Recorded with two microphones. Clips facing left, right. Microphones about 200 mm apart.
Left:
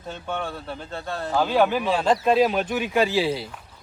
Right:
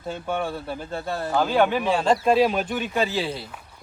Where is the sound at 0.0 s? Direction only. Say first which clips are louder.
Right 3 dB; 10° right (ahead or behind).